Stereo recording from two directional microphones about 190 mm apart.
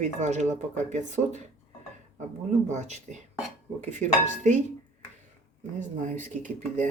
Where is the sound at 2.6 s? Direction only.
40° right (ahead or behind).